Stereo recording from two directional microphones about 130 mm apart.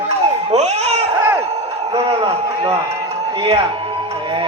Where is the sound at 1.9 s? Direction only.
45° right (ahead or behind).